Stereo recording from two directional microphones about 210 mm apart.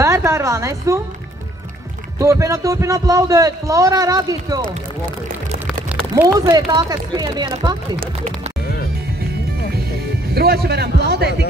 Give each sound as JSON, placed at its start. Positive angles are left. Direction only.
{"t": 0.0, "sound": "a woman's voice", "side_deg": -15}
{"t": 2.1, "sound": "a man's voice", "side_deg": -15}
{"t": 6.1, "sound": "speech", "side_deg": -20}
{"t": 10.3, "sound": "a man's voice", "side_deg": -50}